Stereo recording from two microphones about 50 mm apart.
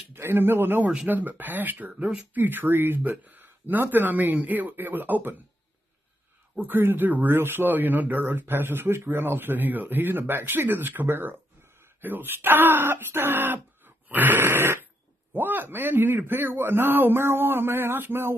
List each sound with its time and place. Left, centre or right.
0.1 s speech: right
3.0 s speech: right
6.6 s speech: right
14.0 s fart: right
15.3 s speech: right